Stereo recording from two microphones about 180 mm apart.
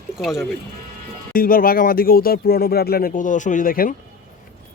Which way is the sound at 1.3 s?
50° left (ahead or behind).